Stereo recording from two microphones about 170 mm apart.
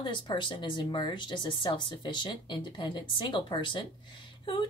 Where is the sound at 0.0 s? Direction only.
30° left (ahead or behind).